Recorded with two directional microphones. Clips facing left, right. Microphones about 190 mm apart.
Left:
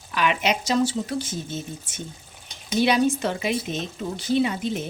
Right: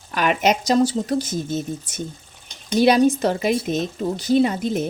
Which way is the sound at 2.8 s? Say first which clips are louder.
Right 5 dB; 40° right (ahead or behind).